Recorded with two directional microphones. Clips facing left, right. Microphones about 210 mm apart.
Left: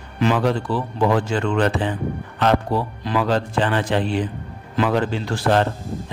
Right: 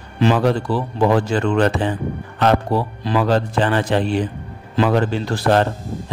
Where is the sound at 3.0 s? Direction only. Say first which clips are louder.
Right 3 dB; 40° right (ahead or behind).